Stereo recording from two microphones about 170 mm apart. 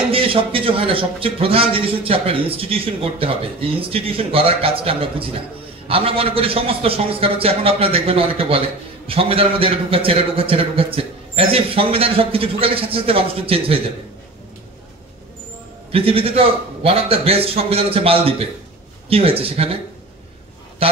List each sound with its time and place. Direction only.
0.1 s a man's voice: 35° right (ahead or behind)
15.9 s a man's voice: 35° right (ahead or behind)
20.8 s a man's voice: 35° right (ahead or behind)